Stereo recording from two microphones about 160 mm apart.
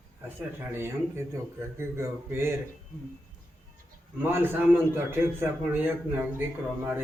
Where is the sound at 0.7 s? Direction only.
15° right (ahead or behind).